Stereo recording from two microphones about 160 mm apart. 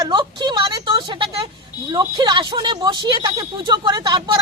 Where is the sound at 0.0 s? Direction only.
30° right (ahead or behind).